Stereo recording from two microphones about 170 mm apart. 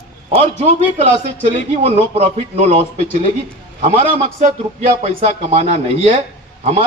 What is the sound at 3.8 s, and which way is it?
A man's voice, 35° right (ahead or behind).